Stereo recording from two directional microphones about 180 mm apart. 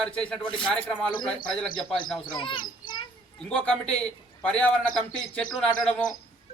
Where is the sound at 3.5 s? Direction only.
5° left (ahead or behind).